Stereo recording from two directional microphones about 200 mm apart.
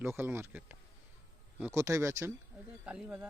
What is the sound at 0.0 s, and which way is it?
Speech, 10° right (ahead or behind).